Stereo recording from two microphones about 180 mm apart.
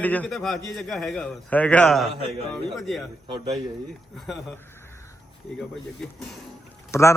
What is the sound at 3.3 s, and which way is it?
Speech, 20° right (ahead or behind).